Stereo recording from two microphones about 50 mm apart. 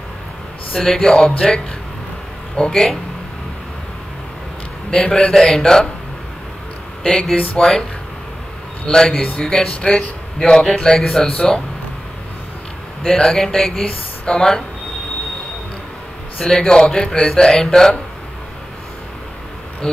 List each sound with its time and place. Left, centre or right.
0.7 s a man's voice: centre
2.7 s a man's voice: centre
4.9 s a man's voice: centre
7.0 s a man's voice: centre
8.8 s a man's voice: centre
13.0 s a man's voice: centre
16.3 s a man's voice: centre